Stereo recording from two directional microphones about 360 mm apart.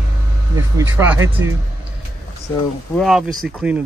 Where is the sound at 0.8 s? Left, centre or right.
Centre.